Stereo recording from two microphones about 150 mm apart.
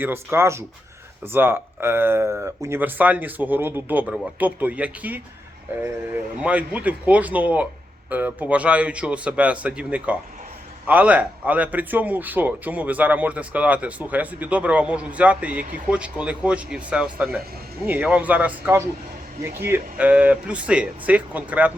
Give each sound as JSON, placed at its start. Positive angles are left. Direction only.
{"t": 0.0, "sound": "a man's voice", "side_deg": -15}